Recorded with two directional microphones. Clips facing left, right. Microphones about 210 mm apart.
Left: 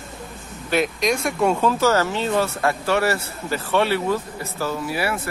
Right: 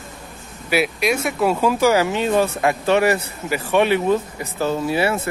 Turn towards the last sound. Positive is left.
turn(degrees=-25)  # may be behind; listen again after turning